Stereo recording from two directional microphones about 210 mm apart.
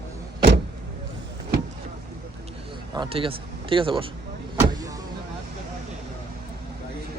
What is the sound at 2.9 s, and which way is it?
Speech, 25° right (ahead or behind).